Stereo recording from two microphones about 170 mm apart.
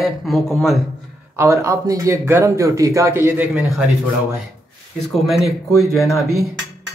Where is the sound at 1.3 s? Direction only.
15° right (ahead or behind).